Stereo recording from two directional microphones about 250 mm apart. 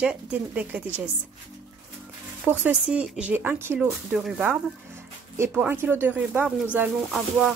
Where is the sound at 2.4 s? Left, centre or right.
Centre.